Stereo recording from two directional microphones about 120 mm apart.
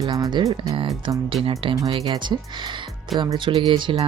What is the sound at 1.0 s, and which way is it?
Speech, 45° right (ahead or behind).